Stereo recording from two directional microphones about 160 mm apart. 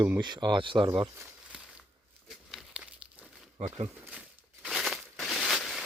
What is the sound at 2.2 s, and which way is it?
Crumpling, centre (ahead or behind).